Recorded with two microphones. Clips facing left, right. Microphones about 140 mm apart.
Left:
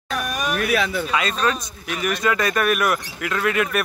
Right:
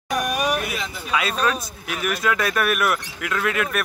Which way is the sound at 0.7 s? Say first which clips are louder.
Left 9 dB; 70° left (ahead or behind).